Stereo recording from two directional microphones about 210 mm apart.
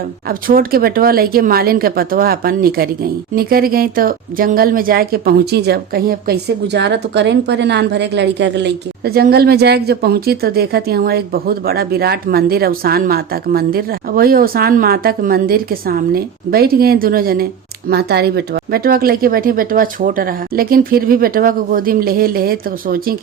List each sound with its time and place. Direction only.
0.3 s speech: 45° right (ahead or behind)